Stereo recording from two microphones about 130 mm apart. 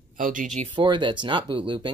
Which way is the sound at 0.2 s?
90° right.